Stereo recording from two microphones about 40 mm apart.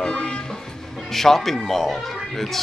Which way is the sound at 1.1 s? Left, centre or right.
Centre.